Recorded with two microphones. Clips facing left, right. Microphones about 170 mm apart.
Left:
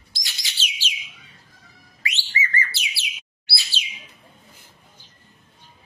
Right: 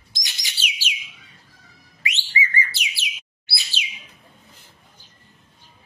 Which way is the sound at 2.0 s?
15° right (ahead or behind).